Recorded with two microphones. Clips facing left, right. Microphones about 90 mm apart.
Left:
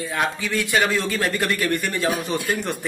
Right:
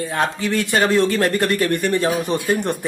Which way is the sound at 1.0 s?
45° right (ahead or behind).